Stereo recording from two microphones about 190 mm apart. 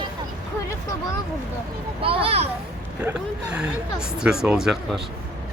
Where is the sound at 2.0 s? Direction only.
30° right (ahead or behind).